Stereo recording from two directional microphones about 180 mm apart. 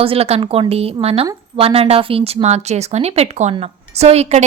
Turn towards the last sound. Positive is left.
turn(degrees=-35)  # may be behind; listen again after turning